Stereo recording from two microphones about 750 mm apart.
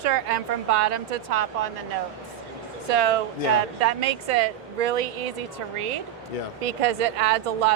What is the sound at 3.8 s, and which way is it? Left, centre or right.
Speech, right.